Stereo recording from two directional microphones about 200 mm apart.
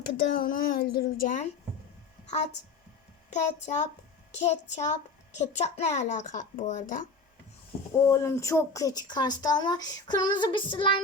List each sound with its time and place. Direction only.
0.2 s speech: 45° left (ahead or behind)
3.3 s a child's voice: 35° left (ahead or behind)
7.9 s speech: 15° left (ahead or behind)